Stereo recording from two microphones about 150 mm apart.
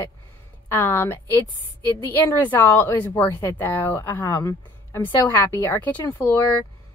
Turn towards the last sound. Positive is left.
turn(degrees=10)  # may be behind; listen again after turning